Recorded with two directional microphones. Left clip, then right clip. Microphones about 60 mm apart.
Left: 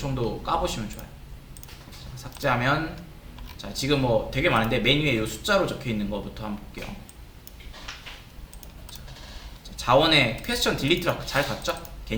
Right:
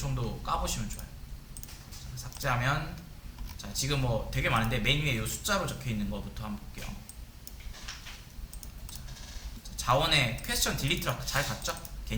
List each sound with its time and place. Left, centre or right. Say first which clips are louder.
0.0 s speech: left 9 dB; right
2.1 s speech: left 7 dB; right
9.7 s speech: left 7 dB; right